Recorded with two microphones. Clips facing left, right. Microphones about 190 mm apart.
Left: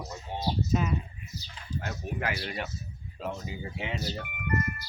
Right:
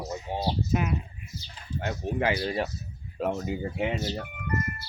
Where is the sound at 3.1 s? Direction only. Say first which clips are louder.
Right 7 dB; 55° right (ahead or behind).